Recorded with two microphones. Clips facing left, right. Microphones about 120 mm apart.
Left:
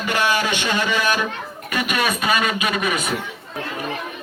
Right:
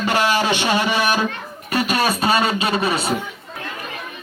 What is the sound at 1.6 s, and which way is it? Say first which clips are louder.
Speech: right 3 dB; 35° right (ahead or behind).